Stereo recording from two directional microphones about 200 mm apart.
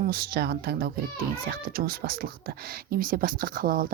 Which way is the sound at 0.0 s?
50° right (ahead or behind).